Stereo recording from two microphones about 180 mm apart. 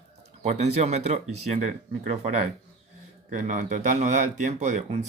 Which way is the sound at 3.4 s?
45° right (ahead or behind).